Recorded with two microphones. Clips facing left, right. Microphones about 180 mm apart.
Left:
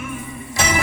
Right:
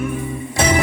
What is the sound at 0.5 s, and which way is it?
Music, 35° right (ahead or behind).